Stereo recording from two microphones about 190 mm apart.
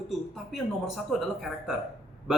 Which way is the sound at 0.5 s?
Centre (ahead or behind).